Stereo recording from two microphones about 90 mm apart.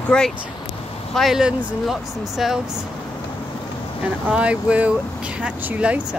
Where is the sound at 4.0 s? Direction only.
10° right (ahead or behind).